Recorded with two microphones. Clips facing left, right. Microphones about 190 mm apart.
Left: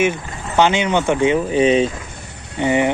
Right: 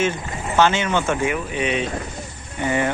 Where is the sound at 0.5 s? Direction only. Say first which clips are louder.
Left 3 dB; 15° left (ahead or behind); by 1.9 s 30° left (ahead or behind).